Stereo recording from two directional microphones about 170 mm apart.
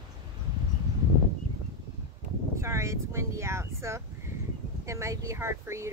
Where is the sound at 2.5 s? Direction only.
15° right (ahead or behind).